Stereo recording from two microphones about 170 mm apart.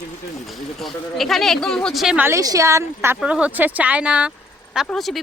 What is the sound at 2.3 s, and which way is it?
Speech, 20° right (ahead or behind).